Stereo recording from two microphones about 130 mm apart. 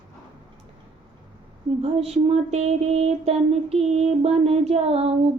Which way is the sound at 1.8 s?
50° right (ahead or behind).